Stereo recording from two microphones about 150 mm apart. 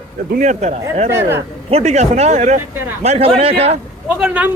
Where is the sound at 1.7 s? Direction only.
50° right (ahead or behind).